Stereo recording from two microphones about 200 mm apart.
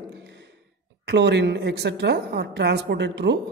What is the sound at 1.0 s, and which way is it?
A man's voice, 60° right (ahead or behind).